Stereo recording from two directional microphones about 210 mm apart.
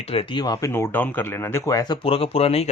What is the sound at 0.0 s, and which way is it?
Speech, 25° left (ahead or behind).